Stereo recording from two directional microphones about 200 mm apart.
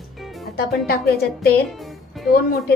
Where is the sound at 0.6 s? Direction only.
50° left (ahead or behind).